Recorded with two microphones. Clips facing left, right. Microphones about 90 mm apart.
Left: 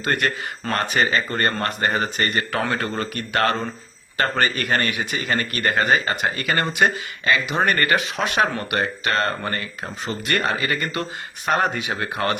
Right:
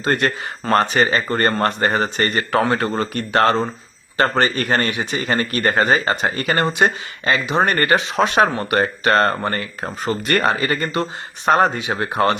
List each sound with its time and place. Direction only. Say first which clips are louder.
0.0 s speech: right 3 dB; 30° right (ahead or behind)